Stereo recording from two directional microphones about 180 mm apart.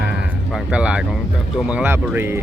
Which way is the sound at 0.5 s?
5° right (ahead or behind).